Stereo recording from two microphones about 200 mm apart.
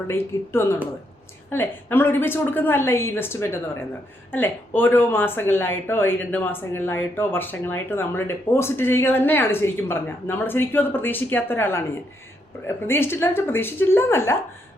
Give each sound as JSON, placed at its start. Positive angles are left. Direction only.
{"t": 0.1, "sound": "speech", "side_deg": 10}